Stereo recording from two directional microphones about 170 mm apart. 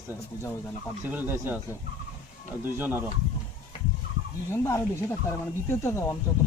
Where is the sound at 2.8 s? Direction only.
10° right (ahead or behind).